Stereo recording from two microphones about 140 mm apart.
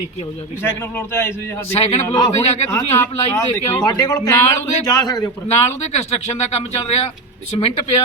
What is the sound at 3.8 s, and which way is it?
A man's voice, 30° left (ahead or behind).